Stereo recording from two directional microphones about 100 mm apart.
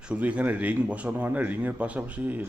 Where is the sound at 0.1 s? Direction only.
15° right (ahead or behind).